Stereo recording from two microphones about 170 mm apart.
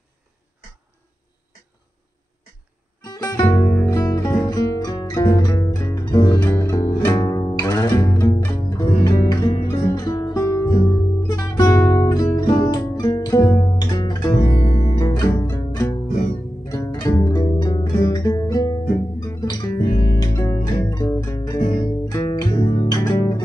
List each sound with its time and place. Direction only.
3.1 s music: 20° left (ahead or behind)
6.4 s music: 15° left (ahead or behind)